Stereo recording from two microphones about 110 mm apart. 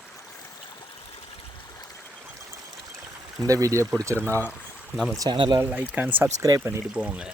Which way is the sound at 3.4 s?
30° right (ahead or behind).